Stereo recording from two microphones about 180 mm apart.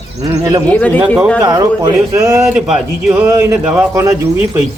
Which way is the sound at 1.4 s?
20° right (ahead or behind).